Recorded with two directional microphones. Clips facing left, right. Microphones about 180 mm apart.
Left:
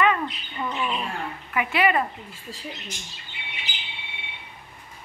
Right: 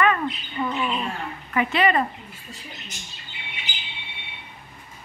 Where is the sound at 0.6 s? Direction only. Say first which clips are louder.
Right 2 dB; 5° right (ahead or behind).